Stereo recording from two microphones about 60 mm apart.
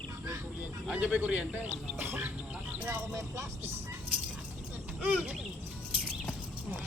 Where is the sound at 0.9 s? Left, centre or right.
Right.